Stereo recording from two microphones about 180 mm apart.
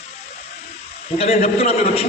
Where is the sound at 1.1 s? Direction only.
35° left (ahead or behind).